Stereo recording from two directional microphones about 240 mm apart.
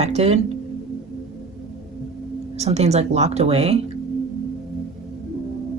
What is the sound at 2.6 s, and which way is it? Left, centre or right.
Speech, right.